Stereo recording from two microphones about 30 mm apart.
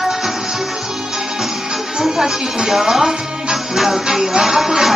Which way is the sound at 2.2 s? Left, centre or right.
Centre.